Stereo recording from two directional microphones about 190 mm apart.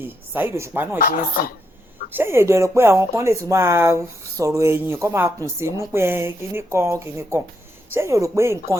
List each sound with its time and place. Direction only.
0.0 s speech: 10° right (ahead or behind)
0.9 s speech: 50° left (ahead or behind)
2.1 s speech: 15° right (ahead or behind)